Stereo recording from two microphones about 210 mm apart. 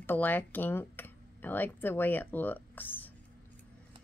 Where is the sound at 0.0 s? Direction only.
10° left (ahead or behind).